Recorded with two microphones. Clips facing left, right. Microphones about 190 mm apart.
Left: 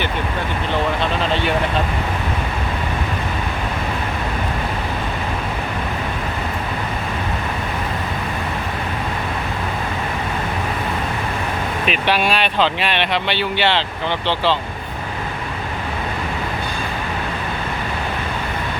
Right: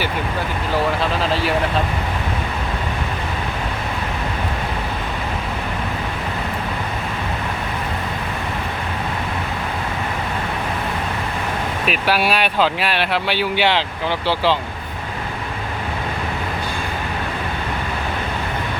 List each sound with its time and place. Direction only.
1.2 s speech: 5° right (ahead or behind)
11.9 s speech: 5° right (ahead or behind)